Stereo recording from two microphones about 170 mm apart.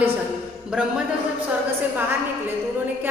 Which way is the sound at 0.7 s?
5° right (ahead or behind).